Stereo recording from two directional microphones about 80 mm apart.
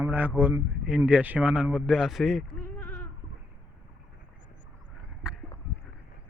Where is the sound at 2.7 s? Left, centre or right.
Left.